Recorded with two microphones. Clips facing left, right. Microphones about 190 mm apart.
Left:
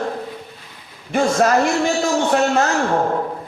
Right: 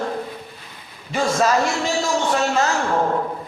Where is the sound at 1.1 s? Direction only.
55° left (ahead or behind).